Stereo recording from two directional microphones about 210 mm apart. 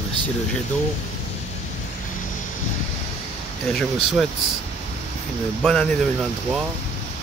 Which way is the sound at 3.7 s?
Centre (ahead or behind).